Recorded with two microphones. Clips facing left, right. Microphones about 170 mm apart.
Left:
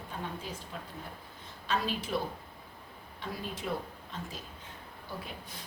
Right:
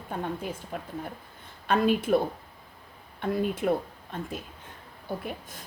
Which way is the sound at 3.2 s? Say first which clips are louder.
Right 12 dB; 55° right (ahead or behind).